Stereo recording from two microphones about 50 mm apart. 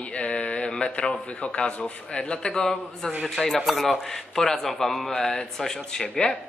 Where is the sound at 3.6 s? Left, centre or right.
Centre.